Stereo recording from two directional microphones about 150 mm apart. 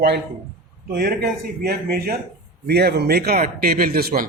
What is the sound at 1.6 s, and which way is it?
A man's voice, 90° right.